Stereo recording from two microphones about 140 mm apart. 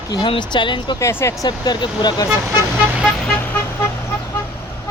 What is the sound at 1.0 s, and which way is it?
Speech, 20° left (ahead or behind).